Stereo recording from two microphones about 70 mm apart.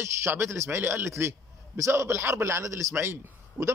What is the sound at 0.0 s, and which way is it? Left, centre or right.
A man's voice, right.